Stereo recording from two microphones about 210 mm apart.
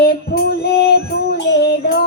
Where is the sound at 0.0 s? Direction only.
50° left (ahead or behind).